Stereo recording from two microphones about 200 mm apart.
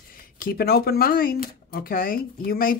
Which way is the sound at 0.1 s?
45° left (ahead or behind).